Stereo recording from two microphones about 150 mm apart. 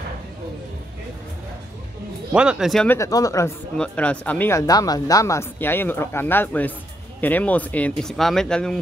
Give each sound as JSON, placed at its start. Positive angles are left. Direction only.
{"t": 2.3, "sound": "speech", "side_deg": -5}
{"t": 2.9, "sound": "speech", "side_deg": 20}
{"t": 3.7, "sound": "speech", "side_deg": 5}